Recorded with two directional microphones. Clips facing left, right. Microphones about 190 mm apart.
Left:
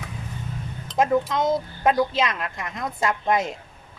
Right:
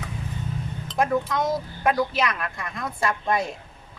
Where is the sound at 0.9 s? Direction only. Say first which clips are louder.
Left 2 dB; 25° left (ahead or behind).